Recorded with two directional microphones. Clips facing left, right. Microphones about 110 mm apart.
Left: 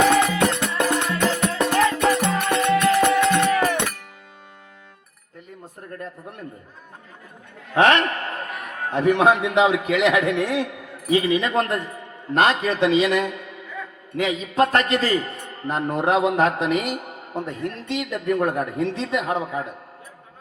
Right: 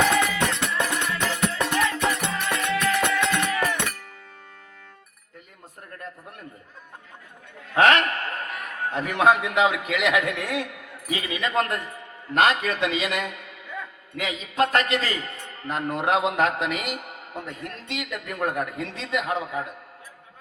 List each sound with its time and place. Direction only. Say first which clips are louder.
0.3 s music: left 4 dB; 45° left (ahead or behind)
7.8 s a man's voice: left 2 dB; 30° left (ahead or behind)